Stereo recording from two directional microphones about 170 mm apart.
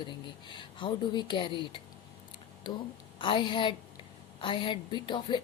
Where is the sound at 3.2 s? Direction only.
30° left (ahead or behind).